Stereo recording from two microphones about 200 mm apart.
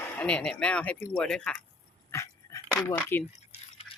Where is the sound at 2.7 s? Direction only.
10° left (ahead or behind).